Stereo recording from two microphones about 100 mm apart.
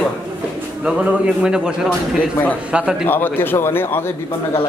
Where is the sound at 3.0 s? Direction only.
20° left (ahead or behind).